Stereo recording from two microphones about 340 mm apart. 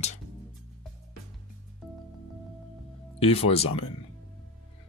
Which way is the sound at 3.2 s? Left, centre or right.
Centre.